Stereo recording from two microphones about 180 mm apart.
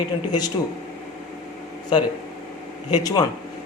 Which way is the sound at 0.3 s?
20° left (ahead or behind).